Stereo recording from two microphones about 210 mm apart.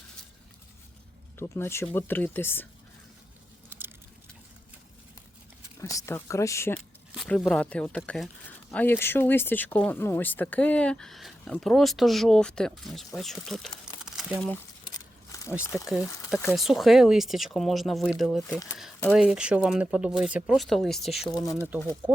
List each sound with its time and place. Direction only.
1.4 s speech: 10° left (ahead or behind)
3.7 s a sound: 10° right (ahead or behind)
5.8 s speech: 15° left (ahead or behind)
7.1 s speech: centre (ahead or behind)
14.8 s a sound: 15° left (ahead or behind)
15.5 s speech: 5° right (ahead or behind)
16.3 s speech: 10° left (ahead or behind)
16.6 s speech: centre (ahead or behind)
21.2 s speech: 20° left (ahead or behind)
22.0 s speech: 5° right (ahead or behind)